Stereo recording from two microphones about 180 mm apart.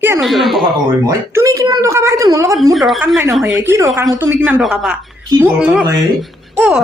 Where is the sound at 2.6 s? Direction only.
Centre (ahead or behind).